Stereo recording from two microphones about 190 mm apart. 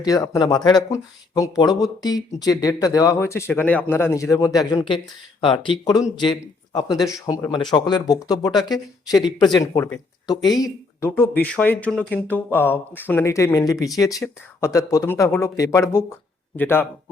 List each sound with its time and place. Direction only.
0.0 s speech: 20° left (ahead or behind)